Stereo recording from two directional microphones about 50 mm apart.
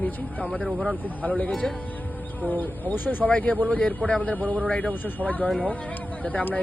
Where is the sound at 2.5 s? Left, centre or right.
Left.